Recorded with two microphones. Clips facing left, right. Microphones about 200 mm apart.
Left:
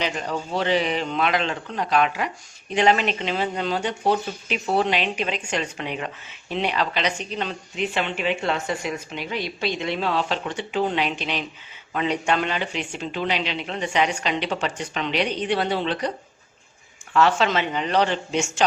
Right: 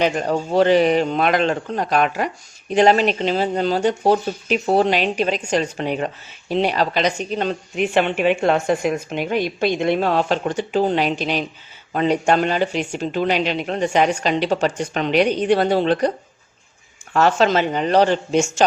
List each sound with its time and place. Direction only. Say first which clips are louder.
0.0 s a woman's voice: right 7 dB; 45° right (ahead or behind)
17.2 s a woman's voice: right 4 dB; 45° right (ahead or behind)